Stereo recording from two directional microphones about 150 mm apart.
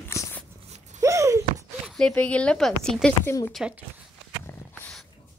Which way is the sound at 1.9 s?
5° left (ahead or behind).